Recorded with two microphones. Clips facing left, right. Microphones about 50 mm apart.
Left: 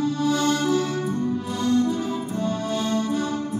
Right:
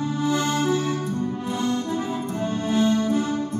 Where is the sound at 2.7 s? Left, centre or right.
Right.